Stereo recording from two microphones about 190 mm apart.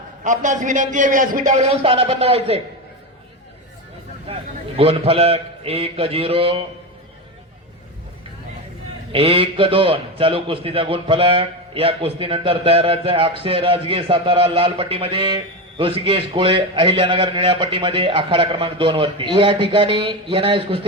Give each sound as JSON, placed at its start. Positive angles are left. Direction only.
{"t": 0.3, "sound": "a man's voice", "side_deg": -40}
{"t": 4.8, "sound": "a man's voice", "side_deg": -30}
{"t": 9.1, "sound": "a man's voice", "side_deg": -30}